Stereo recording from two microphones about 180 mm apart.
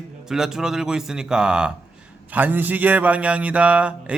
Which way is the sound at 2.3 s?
10° right (ahead or behind).